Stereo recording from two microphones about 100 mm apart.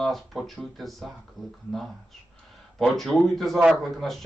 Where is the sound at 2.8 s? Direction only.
Centre (ahead or behind).